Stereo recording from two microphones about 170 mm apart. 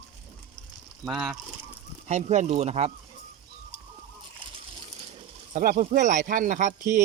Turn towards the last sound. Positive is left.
turn(degrees=-45)  # may be behind; listen again after turning